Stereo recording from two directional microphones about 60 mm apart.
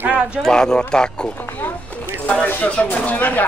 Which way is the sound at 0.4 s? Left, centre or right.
Centre.